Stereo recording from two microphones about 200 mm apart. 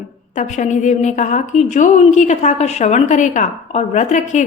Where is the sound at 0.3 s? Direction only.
35° left (ahead or behind).